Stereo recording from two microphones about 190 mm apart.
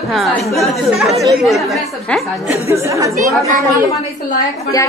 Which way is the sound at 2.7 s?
15° right (ahead or behind).